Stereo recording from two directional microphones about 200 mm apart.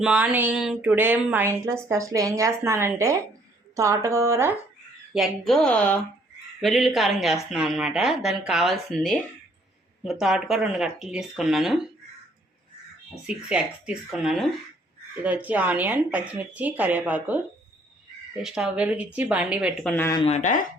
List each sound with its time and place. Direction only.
0.0 s speech: 5° right (ahead or behind)
5.1 s speech: centre (ahead or behind)
13.2 s speech: 5° right (ahead or behind)
18.4 s speech: 5° right (ahead or behind)
19.9 s speech: 15° left (ahead or behind)
20.2 s speech: 35° left (ahead or behind)